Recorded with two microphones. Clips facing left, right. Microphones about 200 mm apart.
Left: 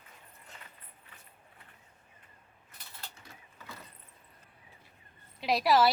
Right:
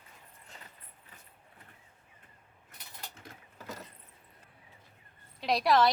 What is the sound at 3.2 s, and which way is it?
Vehicle, 45° right (ahead or behind).